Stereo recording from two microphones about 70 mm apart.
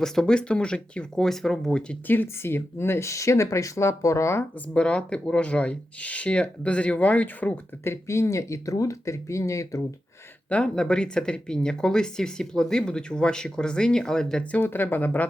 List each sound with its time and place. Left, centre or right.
0.0 s speech: centre
2.0 s speech: left
4.7 s speech: centre
7.9 s speech: left
10.5 s speech: centre
14.5 s speech: left